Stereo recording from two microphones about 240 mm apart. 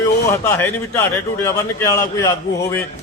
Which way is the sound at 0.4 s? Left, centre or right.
Centre.